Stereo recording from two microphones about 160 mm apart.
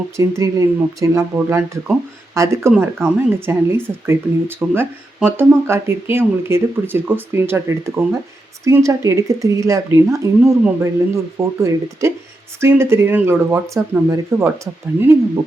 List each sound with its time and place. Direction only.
0.2 s speech: 20° right (ahead or behind)